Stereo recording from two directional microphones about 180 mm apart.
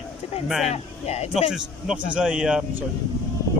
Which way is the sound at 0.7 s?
35° left (ahead or behind).